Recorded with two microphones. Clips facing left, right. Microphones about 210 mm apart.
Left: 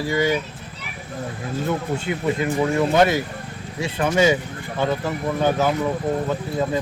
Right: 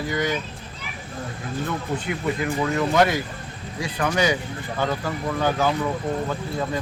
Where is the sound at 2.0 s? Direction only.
25° left (ahead or behind).